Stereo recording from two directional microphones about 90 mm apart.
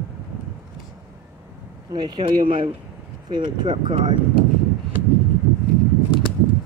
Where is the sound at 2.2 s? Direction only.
80° right.